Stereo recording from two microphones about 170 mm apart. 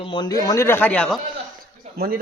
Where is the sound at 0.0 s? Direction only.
30° left (ahead or behind); by 1.2 s 5° left (ahead or behind).